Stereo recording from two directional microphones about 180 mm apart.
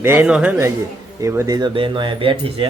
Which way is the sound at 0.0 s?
10° right (ahead or behind).